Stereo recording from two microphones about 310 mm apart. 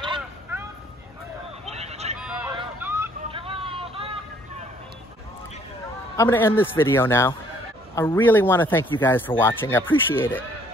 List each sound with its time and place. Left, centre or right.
0.0 s vehicle: centre
1.7 s vehicle: centre
2.1 s a sound: centre
2.5 s vehicle: centre
6.1 s speech: centre